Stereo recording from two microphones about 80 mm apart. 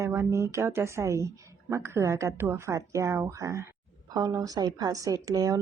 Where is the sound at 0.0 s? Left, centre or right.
Right.